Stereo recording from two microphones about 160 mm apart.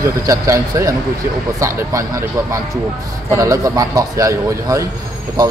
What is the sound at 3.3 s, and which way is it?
A man's voice, 20° right (ahead or behind).